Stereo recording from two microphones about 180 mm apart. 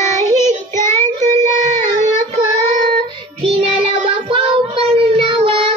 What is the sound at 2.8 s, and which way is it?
Child singing, 30° right (ahead or behind).